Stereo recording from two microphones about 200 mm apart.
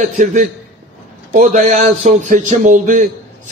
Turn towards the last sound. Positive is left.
turn(degrees=-40)  # may be behind; listen again after turning